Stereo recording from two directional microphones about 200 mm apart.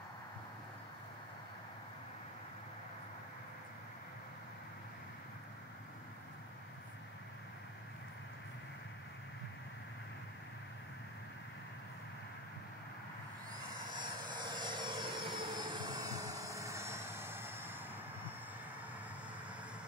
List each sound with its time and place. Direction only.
14.3 s vehicle: 20° right (ahead or behind)